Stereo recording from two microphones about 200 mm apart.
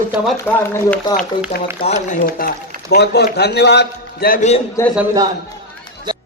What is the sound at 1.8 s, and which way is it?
Speech, 35° left (ahead or behind).